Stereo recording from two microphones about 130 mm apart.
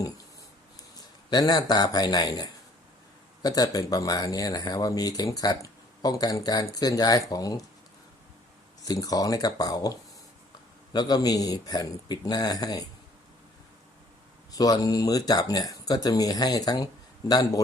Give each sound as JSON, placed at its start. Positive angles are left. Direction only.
{"t": 1.3, "sound": "speech", "side_deg": 30}
{"t": 8.8, "sound": "speech", "side_deg": 30}
{"t": 14.5, "sound": "speech", "side_deg": 30}